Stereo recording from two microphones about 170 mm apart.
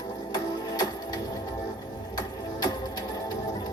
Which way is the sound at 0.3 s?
25° left (ahead or behind).